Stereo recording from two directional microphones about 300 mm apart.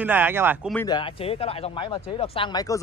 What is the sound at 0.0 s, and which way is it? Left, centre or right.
Speech, centre.